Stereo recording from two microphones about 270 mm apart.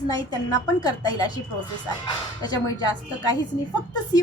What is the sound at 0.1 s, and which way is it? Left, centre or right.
A woman's voice, centre.